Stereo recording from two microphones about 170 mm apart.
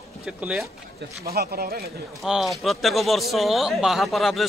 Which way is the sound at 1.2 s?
65° right (ahead or behind).